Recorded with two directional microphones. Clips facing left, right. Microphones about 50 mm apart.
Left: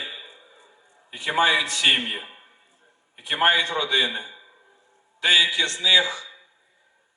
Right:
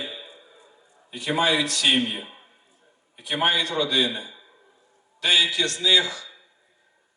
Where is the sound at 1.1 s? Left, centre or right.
Left.